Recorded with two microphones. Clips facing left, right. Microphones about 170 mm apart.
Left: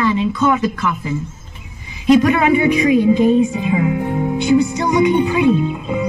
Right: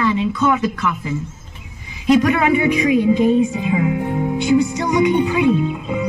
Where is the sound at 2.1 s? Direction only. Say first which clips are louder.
Left 2 dB; 25° left (ahead or behind).